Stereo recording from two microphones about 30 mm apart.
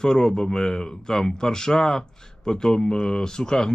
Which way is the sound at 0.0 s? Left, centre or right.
Left.